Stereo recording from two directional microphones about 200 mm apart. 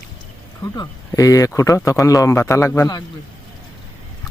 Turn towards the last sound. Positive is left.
turn(degrees=15)  # may be behind; listen again after turning